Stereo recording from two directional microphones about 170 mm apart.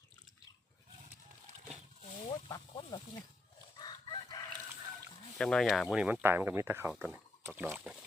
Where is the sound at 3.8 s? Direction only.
25° left (ahead or behind).